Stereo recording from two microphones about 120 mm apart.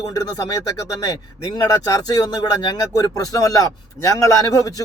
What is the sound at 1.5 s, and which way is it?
Speech, 35° left (ahead or behind).